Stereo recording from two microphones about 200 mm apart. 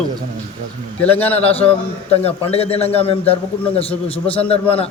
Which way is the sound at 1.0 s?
10° left (ahead or behind).